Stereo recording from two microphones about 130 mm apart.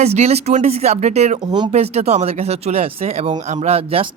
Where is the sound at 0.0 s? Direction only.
55° right (ahead or behind).